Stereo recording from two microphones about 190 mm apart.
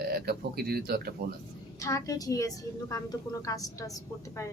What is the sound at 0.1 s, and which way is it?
Speech, 55° right (ahead or behind).